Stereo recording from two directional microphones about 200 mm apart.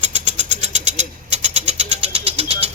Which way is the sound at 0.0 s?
35° right (ahead or behind).